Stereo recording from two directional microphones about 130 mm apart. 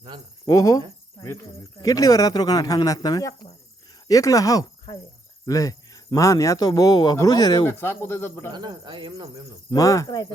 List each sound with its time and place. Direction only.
0.1 s cricket: 35° right (ahead or behind)
0.4 s speech: 25° left (ahead or behind)
7.7 s speech: 20° left (ahead or behind)
8.5 s cricket: 35° right (ahead or behind)
9.7 s speech: 25° left (ahead or behind)